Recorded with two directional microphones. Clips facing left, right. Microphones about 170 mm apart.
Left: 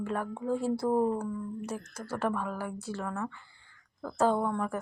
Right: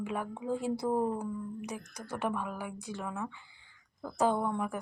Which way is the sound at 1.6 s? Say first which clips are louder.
Left 3 dB; 10° right (ahead or behind).